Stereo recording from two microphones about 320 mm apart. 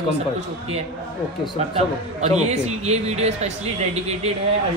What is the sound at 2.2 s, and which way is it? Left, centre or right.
Speech, right.